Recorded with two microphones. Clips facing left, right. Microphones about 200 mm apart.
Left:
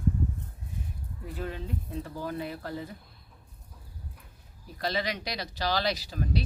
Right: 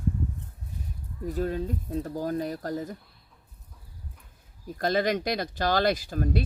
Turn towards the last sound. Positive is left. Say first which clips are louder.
# right 4 dB
turn(degrees=-50)  # may be behind; listen again after turning